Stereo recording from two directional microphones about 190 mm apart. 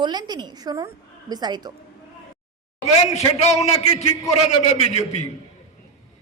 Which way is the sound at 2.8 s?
35° left (ahead or behind).